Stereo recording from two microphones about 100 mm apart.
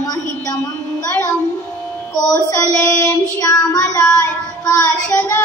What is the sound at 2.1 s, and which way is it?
Child singing, 40° left (ahead or behind).